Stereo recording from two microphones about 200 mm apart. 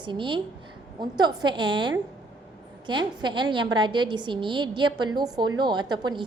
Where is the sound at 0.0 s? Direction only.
25° right (ahead or behind).